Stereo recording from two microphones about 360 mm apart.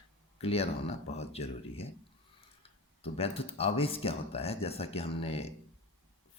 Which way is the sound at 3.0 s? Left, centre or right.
Centre.